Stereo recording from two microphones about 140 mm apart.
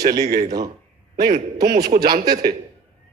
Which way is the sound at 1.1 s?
75° right (ahead or behind).